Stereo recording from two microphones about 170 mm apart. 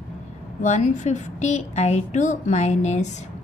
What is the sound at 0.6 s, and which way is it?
A woman's voice, 45° left (ahead or behind).